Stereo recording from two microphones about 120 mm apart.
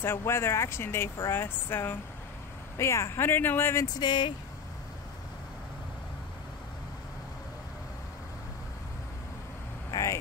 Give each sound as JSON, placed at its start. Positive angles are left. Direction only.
{"t": 0.0, "sound": "speech", "side_deg": 20}
{"t": 4.0, "sound": "speech", "side_deg": 40}
{"t": 9.8, "sound": "vehicle", "side_deg": 30}